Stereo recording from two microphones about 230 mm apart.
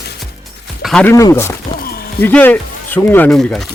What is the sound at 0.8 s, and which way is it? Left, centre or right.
Speech, centre.